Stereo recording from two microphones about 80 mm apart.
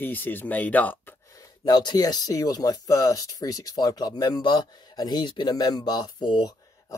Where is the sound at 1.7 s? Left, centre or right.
Left.